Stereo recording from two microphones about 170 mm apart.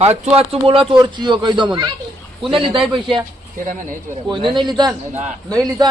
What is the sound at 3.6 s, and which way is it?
Speech, 50° right (ahead or behind).